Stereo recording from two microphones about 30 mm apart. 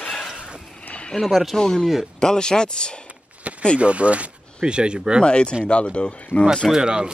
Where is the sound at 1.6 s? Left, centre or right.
Left.